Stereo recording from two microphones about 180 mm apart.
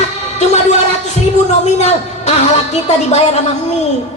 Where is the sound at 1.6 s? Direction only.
40° left (ahead or behind).